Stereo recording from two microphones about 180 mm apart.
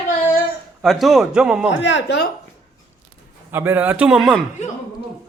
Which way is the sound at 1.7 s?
90° left.